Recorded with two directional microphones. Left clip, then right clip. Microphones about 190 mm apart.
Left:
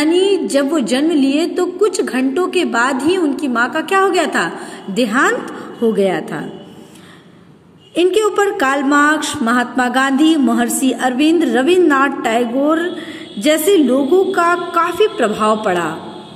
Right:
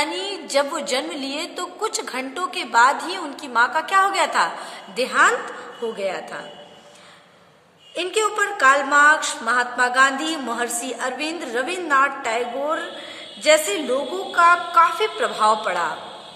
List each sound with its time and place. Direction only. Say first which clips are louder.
0.0 s a woman's voice: left 12 dB; 10° left (ahead or behind); by 6.4 s 30° left (ahead or behind)
7.9 s speech: left 8 dB; 25° left (ahead or behind)